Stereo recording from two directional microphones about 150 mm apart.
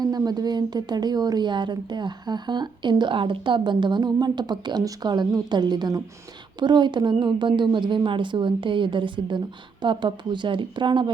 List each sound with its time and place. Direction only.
0.0 s a woman's voice: 25° right (ahead or behind)